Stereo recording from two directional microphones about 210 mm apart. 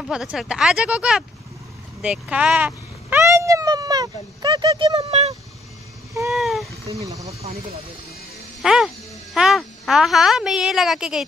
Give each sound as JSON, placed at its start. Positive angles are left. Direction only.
{"t": 0.0, "sound": "speech", "side_deg": 0}
{"t": 6.3, "sound": "a sound", "side_deg": 0}
{"t": 8.6, "sound": "a child's voice", "side_deg": 0}